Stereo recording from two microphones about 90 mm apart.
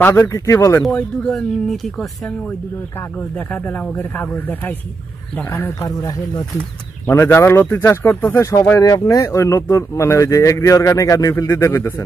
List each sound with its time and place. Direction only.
0.0 s speech: 25° left (ahead or behind)
0.8 s speech: 5° left (ahead or behind)
3.2 s speech: 20° left (ahead or behind)
5.9 s speech: 50° left (ahead or behind)
7.1 s speech: 25° left (ahead or behind)